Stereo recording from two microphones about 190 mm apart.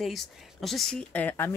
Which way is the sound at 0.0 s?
Centre (ahead or behind).